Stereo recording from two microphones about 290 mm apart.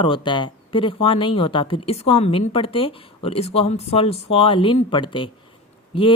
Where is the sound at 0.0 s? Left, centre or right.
Centre.